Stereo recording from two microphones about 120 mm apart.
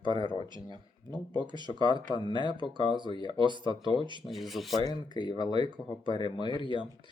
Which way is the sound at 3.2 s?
40° right (ahead or behind).